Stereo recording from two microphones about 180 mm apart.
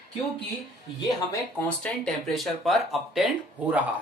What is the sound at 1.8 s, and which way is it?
Speech, 5° left (ahead or behind).